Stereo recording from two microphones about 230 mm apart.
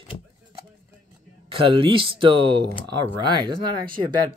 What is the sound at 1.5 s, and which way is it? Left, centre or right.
Speech, right.